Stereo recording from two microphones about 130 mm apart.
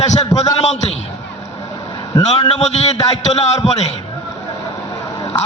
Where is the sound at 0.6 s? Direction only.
60° left (ahead or behind).